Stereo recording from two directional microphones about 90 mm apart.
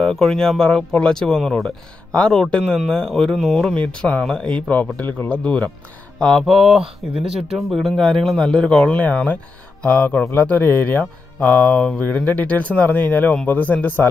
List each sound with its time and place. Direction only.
0.0 s speech: 5° left (ahead or behind)
6.1 s speech: centre (ahead or behind); by 14.0 s 20° left (ahead or behind)